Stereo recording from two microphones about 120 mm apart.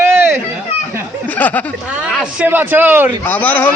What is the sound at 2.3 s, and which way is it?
Speech, 15° right (ahead or behind).